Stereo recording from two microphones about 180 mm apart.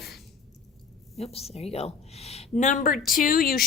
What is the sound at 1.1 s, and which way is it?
A woman's voice, 35° left (ahead or behind).